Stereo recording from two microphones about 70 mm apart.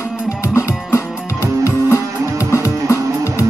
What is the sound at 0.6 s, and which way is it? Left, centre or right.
Music, left.